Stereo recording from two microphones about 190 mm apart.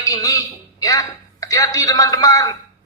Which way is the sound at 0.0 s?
15° left (ahead or behind).